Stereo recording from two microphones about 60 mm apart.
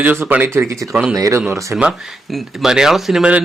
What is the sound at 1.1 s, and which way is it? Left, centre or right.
Speech, right.